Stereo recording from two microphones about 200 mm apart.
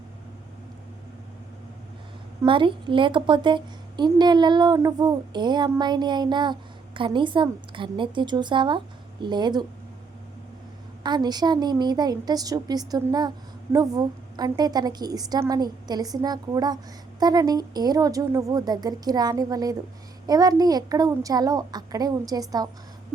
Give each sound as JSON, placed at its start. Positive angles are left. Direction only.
{"t": 2.4, "sound": "a woman's voice", "side_deg": -25}
{"t": 11.0, "sound": "a woman's voice", "side_deg": -20}